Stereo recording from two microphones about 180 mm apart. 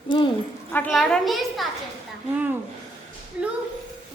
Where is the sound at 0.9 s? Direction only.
Centre (ahead or behind).